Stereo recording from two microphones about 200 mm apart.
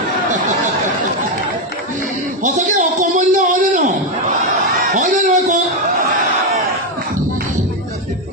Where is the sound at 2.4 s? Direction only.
35° right (ahead or behind).